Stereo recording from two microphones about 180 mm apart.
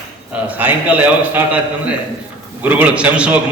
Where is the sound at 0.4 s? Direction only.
10° right (ahead or behind).